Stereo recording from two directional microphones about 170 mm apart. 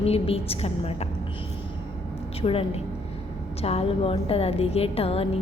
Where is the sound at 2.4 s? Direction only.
35° left (ahead or behind).